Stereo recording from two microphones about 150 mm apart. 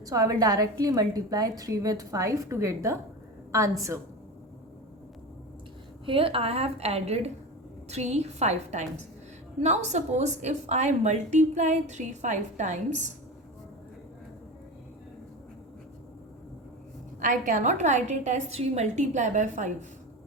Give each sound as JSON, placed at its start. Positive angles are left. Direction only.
{"t": 0.0, "sound": "a woman's voice", "side_deg": -25}
{"t": 6.1, "sound": "a woman's voice", "side_deg": -40}
{"t": 17.2, "sound": "a woman's voice", "side_deg": -60}